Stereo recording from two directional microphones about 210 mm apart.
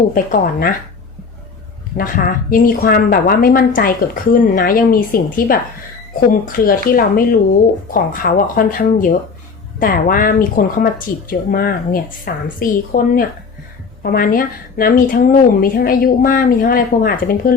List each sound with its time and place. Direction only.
0.1 s speech: 40° left (ahead or behind)
2.0 s a woman's voice: 40° left (ahead or behind)